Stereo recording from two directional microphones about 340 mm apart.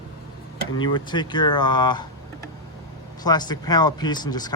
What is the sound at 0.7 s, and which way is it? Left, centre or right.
Speech, centre.